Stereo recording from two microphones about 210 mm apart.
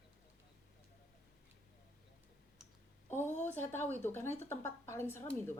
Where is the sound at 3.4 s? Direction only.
10° left (ahead or behind).